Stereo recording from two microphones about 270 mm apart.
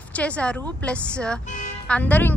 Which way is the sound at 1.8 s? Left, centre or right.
Centre.